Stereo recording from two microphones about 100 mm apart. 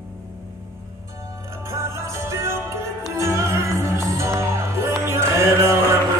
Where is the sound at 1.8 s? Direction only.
25° right (ahead or behind).